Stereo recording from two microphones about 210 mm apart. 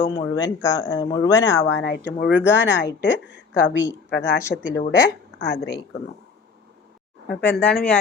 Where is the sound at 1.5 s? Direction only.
60° left (ahead or behind).